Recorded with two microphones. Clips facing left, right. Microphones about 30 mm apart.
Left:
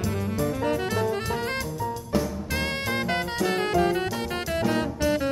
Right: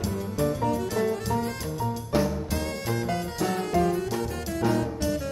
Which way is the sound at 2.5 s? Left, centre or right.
Left.